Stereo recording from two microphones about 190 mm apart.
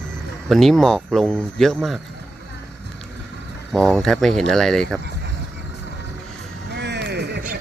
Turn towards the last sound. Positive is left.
turn(degrees=-60)  # may be behind; listen again after turning